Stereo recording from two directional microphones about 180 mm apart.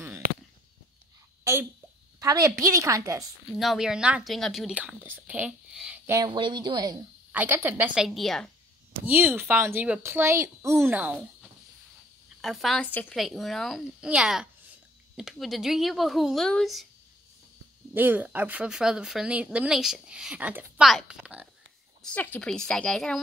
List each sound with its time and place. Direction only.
1.4 s a sound: 15° right (ahead or behind)
2.1 s speech: 20° right (ahead or behind)
3.5 s speech: centre (ahead or behind)
6.1 s speech: 25° right (ahead or behind); by 8.5 s centre (ahead or behind)
9.0 s speech: 10° right (ahead or behind)
12.4 s speech: centre (ahead or behind)
17.9 s speech: 10° right (ahead or behind)
22.0 s speech: 10° left (ahead or behind)